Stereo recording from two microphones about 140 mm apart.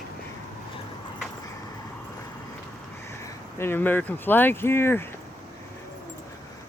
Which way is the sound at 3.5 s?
15° left (ahead or behind).